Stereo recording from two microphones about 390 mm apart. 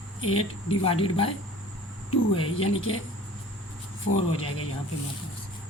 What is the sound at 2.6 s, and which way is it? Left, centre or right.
Speech, left.